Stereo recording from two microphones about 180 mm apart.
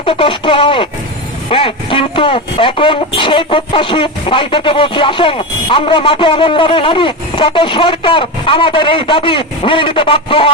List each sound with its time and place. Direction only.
0.0 s speech: 30° left (ahead or behind)